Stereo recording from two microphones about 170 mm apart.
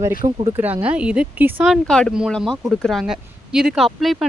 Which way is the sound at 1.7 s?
5° left (ahead or behind).